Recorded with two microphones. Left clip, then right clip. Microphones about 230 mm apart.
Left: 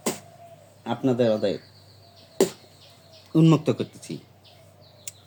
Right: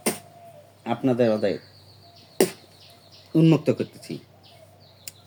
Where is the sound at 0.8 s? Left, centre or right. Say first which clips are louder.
Right 1 dB; centre.